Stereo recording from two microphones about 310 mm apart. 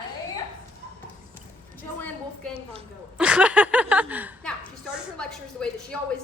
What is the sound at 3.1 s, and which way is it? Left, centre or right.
Speech, centre.